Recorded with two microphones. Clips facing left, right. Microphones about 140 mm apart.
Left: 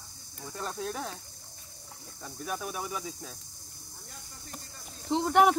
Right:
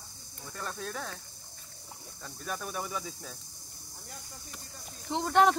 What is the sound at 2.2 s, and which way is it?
Speech, 5° left (ahead or behind).